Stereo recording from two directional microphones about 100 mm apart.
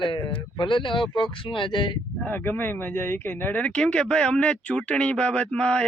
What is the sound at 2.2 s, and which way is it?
A man's voice, 20° left (ahead or behind).